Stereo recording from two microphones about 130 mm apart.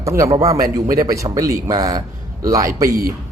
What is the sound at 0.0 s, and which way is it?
A man's voice, 25° right (ahead or behind).